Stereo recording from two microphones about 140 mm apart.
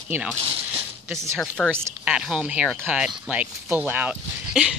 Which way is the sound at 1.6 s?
15° right (ahead or behind).